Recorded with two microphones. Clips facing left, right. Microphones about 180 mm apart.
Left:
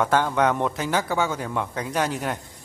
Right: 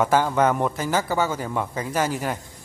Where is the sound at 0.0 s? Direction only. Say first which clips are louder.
Right 1 dB; 5° right (ahead or behind).